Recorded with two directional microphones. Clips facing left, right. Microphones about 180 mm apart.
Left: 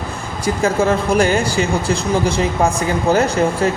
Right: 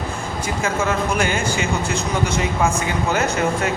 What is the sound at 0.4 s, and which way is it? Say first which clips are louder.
Speech: left 7 dB; 35° left (ahead or behind).